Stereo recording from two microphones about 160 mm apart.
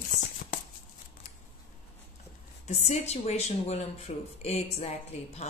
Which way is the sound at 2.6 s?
45° left (ahead or behind).